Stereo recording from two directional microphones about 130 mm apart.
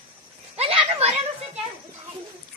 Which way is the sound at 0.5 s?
50° right (ahead or behind).